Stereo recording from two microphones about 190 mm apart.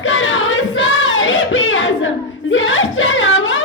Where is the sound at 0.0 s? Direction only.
90° left.